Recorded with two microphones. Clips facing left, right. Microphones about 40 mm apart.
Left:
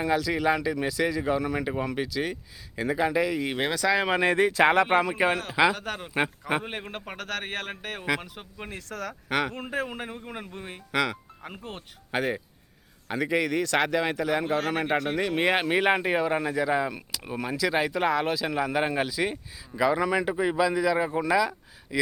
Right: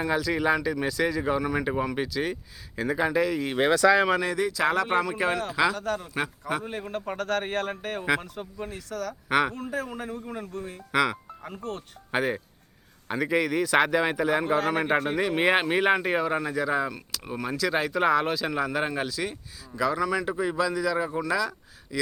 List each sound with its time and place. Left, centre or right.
0.0 s speech: centre
4.2 s a man's voice: left
7.2 s speech: centre
8.5 s speech: left
9.8 s a man's voice: left
10.9 s speech: centre
11.4 s speech: left
12.1 s speech: centre
15.7 s speech: centre